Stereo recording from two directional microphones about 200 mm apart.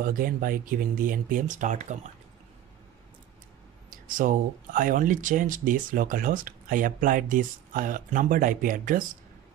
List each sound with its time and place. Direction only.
0.0 s speech: 45° right (ahead or behind)
4.1 s speech: 40° right (ahead or behind)